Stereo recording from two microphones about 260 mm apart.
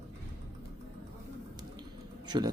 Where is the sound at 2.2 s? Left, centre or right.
Centre.